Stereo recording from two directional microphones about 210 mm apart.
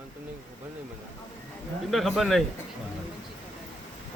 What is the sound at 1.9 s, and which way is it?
Speech, centre (ahead or behind).